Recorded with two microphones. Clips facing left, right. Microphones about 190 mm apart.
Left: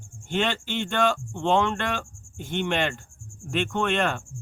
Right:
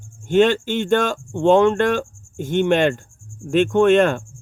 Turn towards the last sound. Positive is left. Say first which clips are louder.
# right 11 dB
turn(degrees=-45)  # may be behind; listen again after turning